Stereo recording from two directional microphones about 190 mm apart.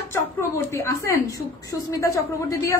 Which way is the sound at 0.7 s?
15° left (ahead or behind).